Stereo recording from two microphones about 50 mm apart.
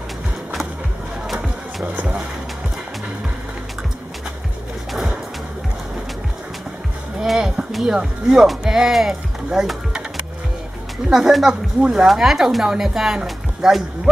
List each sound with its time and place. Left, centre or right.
1.3 s music: centre
4.9 s a sound: centre
7.2 s speech: centre
14.1 s speech: centre